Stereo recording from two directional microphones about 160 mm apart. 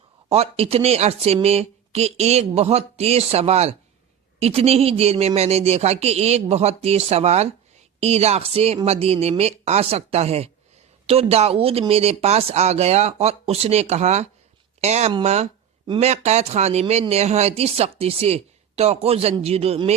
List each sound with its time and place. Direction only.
0.3 s speech: 40° right (ahead or behind)